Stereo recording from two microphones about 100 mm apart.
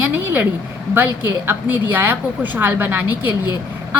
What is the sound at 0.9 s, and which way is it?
A woman's voice, 20° right (ahead or behind).